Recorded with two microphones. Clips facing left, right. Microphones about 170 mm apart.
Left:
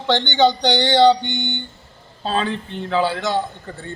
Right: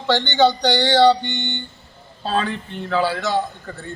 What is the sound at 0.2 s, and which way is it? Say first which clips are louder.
Speech: even; 20° left (ahead or behind).